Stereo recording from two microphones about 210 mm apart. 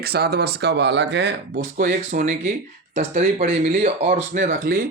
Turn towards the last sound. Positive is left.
turn(degrees=-40)  # may be behind; listen again after turning